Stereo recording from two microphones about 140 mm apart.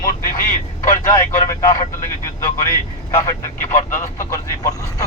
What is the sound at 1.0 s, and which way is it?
Speech, 20° left (ahead or behind).